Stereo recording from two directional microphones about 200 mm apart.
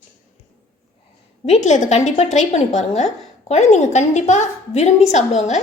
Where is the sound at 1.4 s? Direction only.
35° left (ahead or behind).